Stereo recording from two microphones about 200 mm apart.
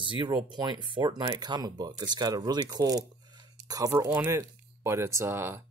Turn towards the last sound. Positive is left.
turn(degrees=-15)  # may be behind; listen again after turning